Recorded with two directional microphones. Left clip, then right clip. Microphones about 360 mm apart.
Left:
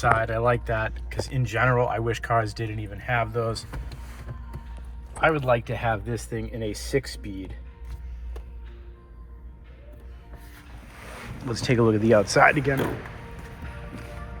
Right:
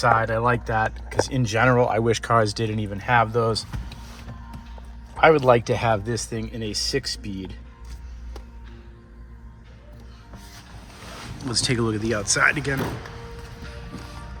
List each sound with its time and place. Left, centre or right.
0.0 s speech: centre
5.2 s speech: centre
11.4 s speech: centre